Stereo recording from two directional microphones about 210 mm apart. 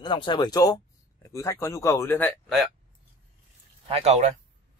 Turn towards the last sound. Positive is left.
turn(degrees=-30)  # may be behind; listen again after turning